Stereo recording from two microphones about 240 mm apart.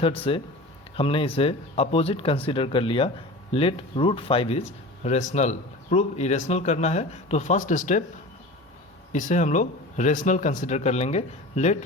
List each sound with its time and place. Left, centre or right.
0.3 s speech: left
9.1 s speech: left